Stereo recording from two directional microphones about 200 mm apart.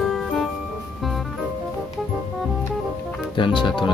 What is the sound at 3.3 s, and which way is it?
Speech, 25° left (ahead or behind).